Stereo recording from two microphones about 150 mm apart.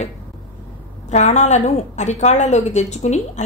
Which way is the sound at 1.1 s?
50° left (ahead or behind).